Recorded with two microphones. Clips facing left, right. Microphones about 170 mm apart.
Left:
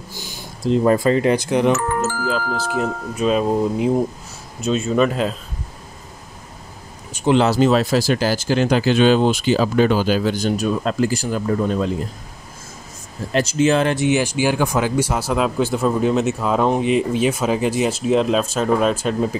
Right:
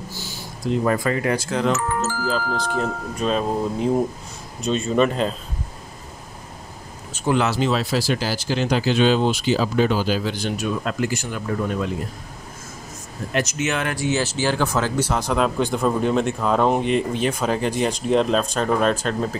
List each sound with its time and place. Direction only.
0.1 s a sound: 15° left (ahead or behind)
0.7 s speech: 30° left (ahead or behind)
1.8 s speech: 55° left (ahead or behind)
2.5 s a man's voice: 5° left (ahead or behind)
7.3 s speech: 40° left (ahead or behind)
13.3 s speech: 30° left (ahead or behind); by 19.3 s 10° left (ahead or behind)